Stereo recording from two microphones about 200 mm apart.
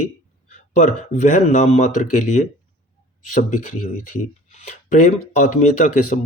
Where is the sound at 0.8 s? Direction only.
40° left (ahead or behind).